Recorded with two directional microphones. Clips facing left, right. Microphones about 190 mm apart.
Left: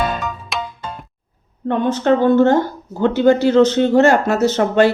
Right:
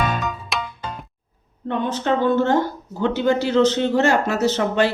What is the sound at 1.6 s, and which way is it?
Speech, 50° left (ahead or behind).